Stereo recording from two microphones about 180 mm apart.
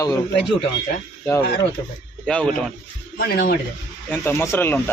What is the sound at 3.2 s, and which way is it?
Speech, 60° left (ahead or behind).